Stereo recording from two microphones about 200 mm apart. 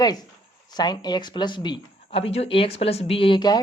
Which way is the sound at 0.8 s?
20° left (ahead or behind).